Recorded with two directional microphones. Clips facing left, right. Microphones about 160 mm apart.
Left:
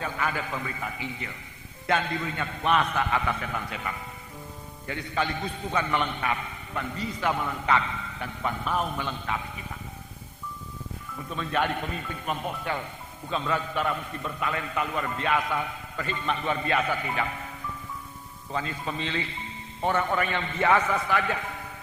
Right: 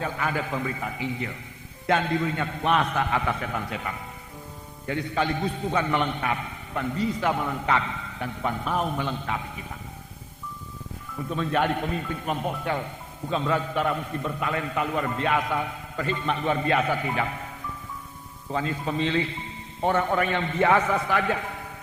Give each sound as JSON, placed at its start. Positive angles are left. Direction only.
{"t": 0.0, "sound": "a man's voice", "side_deg": -40}
{"t": 11.3, "sound": "a man's voice", "side_deg": -40}
{"t": 18.5, "sound": "a man's voice", "side_deg": -40}